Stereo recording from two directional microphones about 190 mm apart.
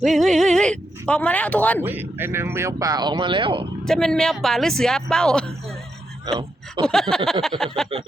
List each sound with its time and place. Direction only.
0.0 s speech: centre (ahead or behind)
1.8 s speech: 10° right (ahead or behind); by 3.7 s 25° right (ahead or behind)
3.8 s speech: centre (ahead or behind)
6.2 s speech: 25° right (ahead or behind)
6.8 s speech: centre (ahead or behind)